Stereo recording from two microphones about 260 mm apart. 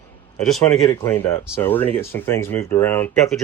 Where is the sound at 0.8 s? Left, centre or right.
Centre.